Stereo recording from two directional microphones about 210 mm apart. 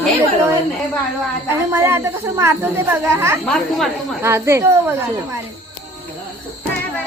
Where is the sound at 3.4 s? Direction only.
Centre (ahead or behind).